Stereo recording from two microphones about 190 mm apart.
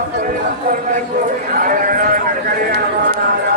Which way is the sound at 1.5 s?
45° right (ahead or behind).